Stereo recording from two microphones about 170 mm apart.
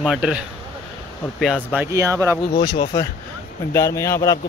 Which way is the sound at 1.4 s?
5° right (ahead or behind).